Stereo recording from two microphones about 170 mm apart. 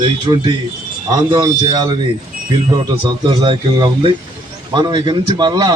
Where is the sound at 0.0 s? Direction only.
25° right (ahead or behind).